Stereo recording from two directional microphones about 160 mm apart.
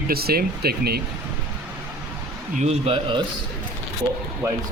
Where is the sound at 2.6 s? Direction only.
45° right (ahead or behind).